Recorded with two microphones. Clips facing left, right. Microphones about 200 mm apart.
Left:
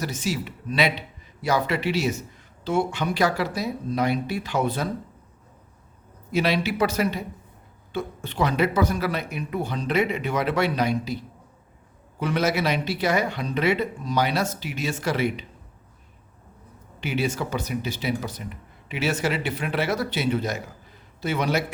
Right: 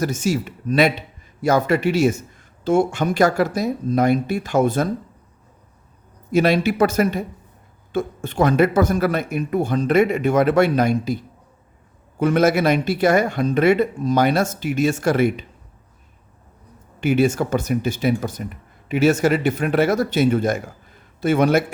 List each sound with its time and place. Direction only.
0.0 s speech: 45° right (ahead or behind)
6.3 s speech: 50° right (ahead or behind)
12.2 s speech: 50° right (ahead or behind)
17.0 s speech: 50° right (ahead or behind)